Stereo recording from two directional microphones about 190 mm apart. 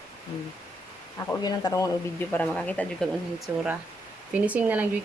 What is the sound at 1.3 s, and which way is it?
Speech, 20° left (ahead or behind).